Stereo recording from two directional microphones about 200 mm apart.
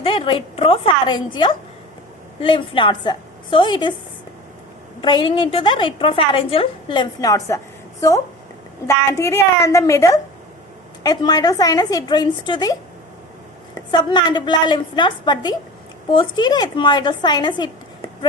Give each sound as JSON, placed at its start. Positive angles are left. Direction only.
{"t": 0.0, "sound": "a woman's voice", "side_deg": 25}
{"t": 4.9, "sound": "a woman's voice", "side_deg": 25}
{"t": 9.1, "sound": "a woman's voice", "side_deg": 15}
{"t": 13.7, "sound": "a woman's voice", "side_deg": 20}